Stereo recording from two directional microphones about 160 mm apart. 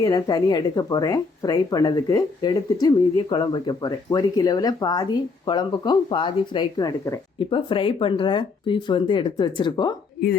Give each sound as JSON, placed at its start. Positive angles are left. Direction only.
{"t": 0.0, "sound": "speech", "side_deg": 25}
{"t": 7.3, "sound": "speech", "side_deg": 30}